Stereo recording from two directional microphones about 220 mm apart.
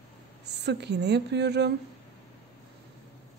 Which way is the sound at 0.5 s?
50° right (ahead or behind).